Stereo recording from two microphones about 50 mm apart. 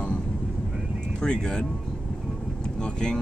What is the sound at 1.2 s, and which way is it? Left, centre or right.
Speech, centre.